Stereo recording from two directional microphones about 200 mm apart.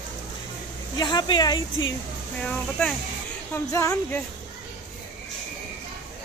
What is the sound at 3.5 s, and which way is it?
Speech, 15° left (ahead or behind).